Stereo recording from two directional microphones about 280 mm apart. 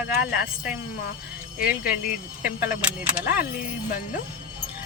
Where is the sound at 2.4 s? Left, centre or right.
Centre.